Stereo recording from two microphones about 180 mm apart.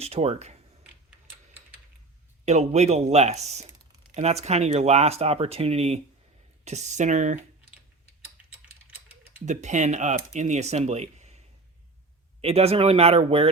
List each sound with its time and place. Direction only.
0.0 s speech: 35° right (ahead or behind)
2.4 s speech: 40° right (ahead or behind)
9.5 s speech: 40° right (ahead or behind)